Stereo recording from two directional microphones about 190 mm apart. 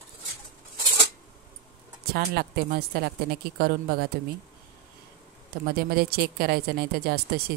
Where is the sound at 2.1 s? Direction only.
55° right (ahead or behind).